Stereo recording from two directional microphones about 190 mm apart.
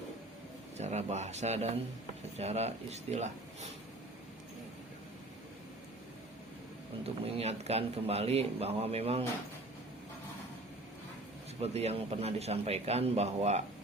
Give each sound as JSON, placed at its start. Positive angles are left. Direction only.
{"t": 0.8, "sound": "a man's voice", "side_deg": -35}
{"t": 7.0, "sound": "a man's voice", "side_deg": -30}
{"t": 11.6, "sound": "a man's voice", "side_deg": -35}